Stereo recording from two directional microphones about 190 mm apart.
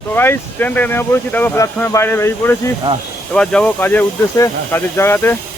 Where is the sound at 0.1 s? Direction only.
10° left (ahead or behind).